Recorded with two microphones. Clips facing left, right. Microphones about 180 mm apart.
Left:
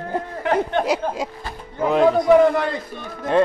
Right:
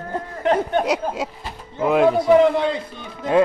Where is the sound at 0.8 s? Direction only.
Centre (ahead or behind).